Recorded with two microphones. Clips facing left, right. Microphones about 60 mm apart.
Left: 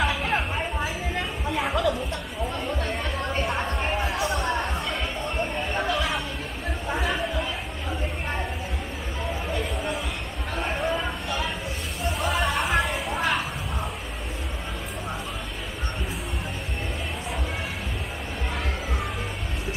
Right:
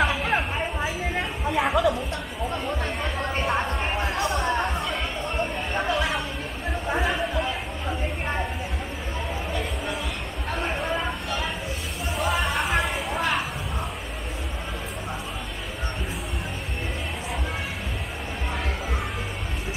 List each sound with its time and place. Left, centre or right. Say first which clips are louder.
0.0 s a sound: right 2 dB; centre
1.1 s music: right 2 dB; centre
2.8 s a sound: right 1 dB; centre
3.7 s music: even; centre
5.8 s chatter: right 2 dB; centre
10.5 s music: even; centre